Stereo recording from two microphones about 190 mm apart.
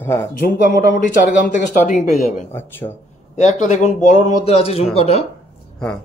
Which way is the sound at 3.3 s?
35° left (ahead or behind).